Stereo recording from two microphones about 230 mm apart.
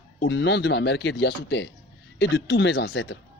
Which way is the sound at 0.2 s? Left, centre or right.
Left.